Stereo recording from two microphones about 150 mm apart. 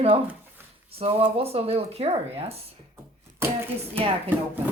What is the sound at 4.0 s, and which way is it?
Speech, 40° right (ahead or behind).